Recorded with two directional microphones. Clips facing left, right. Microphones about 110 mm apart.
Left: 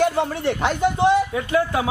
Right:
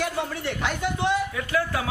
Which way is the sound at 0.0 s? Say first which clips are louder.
Left 8 dB; 30° left (ahead or behind).